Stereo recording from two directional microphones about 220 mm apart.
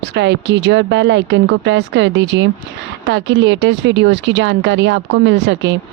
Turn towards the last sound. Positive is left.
turn(degrees=-55)  # may be behind; listen again after turning